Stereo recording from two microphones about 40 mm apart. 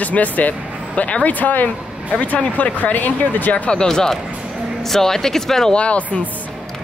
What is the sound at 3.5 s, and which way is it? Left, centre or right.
Speech, left.